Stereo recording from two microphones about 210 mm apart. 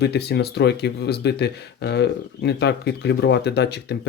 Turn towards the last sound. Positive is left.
turn(degrees=50)  # may be behind; listen again after turning